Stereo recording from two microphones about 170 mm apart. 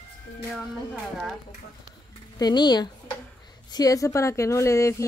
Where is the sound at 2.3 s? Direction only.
25° left (ahead or behind).